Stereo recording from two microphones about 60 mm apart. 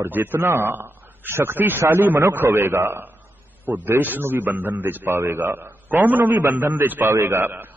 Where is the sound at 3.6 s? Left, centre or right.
Right.